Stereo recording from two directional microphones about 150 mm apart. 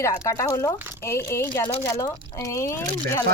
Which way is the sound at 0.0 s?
20° left (ahead or behind).